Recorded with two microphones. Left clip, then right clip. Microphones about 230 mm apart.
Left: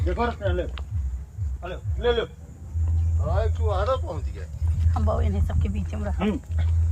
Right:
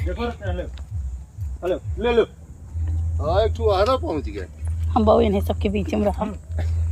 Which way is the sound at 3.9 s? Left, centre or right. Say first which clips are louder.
Right 5 dB; right.